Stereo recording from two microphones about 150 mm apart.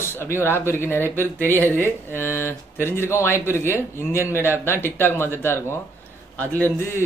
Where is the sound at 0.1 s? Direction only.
15° left (ahead or behind).